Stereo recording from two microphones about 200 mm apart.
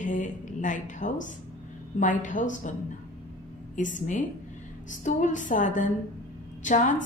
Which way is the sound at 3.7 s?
40° left (ahead or behind).